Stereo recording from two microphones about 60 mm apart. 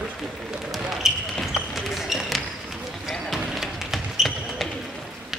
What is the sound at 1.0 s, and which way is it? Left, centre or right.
Basketball bounce, centre.